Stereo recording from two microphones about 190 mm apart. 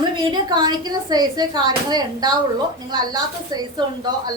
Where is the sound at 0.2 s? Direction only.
25° right (ahead or behind).